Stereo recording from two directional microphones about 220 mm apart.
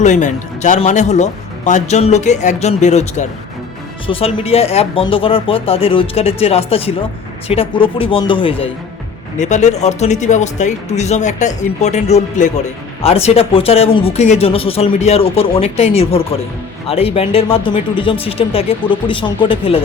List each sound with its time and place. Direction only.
0.0 s a man's voice: 35° left (ahead or behind)